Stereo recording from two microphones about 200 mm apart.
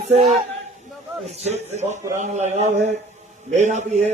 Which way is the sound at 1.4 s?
35° right (ahead or behind).